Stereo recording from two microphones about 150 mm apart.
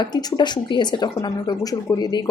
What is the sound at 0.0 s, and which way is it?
Speech, 25° left (ahead or behind).